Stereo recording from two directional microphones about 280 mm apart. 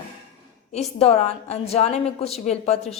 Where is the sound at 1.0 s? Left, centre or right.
Left.